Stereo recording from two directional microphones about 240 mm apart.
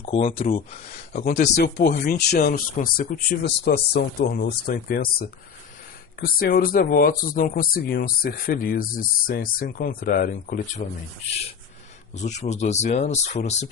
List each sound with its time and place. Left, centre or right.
0.0 s speech: left
1.5 s speech: left
6.1 s speech: left
12.1 s speech: left